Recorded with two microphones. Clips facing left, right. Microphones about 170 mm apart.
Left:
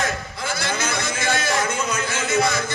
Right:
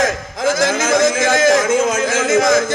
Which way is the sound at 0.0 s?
90° right.